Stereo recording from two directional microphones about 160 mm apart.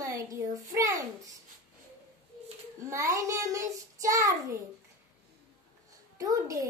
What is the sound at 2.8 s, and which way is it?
Child singing, 20° right (ahead or behind).